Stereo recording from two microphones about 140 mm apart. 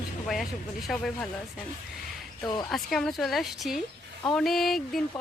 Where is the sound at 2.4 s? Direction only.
30° left (ahead or behind).